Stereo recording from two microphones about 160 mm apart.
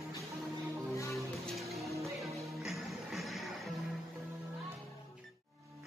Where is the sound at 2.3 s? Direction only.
Centre (ahead or behind).